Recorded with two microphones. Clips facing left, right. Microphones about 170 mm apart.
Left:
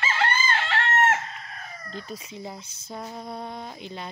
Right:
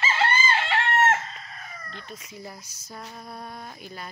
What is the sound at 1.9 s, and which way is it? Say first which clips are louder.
Cat: left 5 dB; 35° left (ahead or behind).